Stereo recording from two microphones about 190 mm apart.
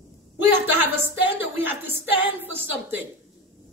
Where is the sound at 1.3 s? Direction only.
10° right (ahead or behind).